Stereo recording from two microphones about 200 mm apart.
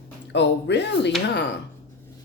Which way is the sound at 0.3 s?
60° left (ahead or behind).